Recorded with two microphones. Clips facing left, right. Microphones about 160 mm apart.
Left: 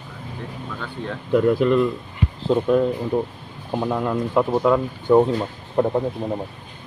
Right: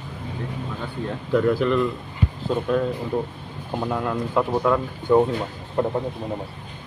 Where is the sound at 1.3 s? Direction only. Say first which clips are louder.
Left 3 dB; 15° left (ahead or behind).